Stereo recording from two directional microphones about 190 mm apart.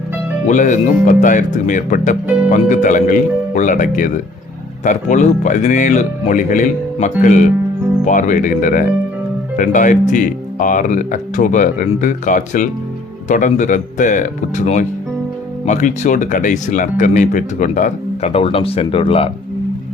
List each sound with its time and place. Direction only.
0.4 s speech: 40° left (ahead or behind)